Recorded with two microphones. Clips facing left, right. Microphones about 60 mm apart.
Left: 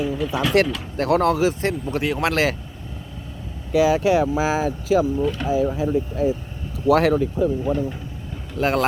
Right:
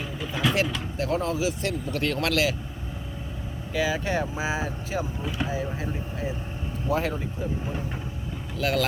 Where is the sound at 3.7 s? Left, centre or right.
Left.